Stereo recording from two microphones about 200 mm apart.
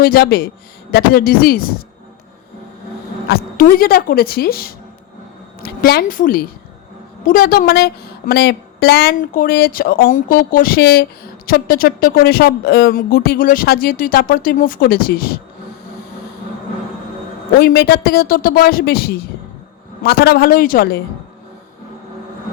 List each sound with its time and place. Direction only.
0.0 s speech: 50° left (ahead or behind)
3.2 s speech: 50° left (ahead or behind)
17.6 s speech: 50° left (ahead or behind)